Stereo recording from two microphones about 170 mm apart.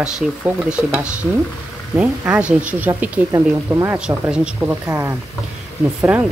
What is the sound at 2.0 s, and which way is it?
Speech, 5° right (ahead or behind).